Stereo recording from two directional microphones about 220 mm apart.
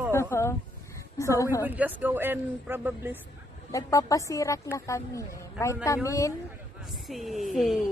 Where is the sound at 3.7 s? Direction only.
15° left (ahead or behind).